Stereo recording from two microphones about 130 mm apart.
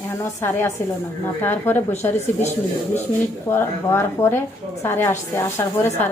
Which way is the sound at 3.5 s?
20° left (ahead or behind).